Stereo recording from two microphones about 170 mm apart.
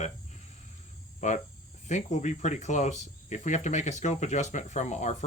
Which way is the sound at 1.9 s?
45° left (ahead or behind).